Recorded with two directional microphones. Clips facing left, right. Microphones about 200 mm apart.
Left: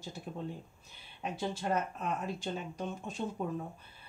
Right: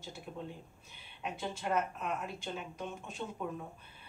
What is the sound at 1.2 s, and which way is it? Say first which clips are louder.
Speech: left 3 dB; 35° left (ahead or behind).